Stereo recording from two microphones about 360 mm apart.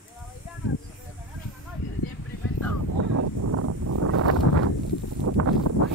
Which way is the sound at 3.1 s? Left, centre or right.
Right.